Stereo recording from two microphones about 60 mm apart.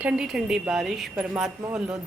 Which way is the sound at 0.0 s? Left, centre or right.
Right.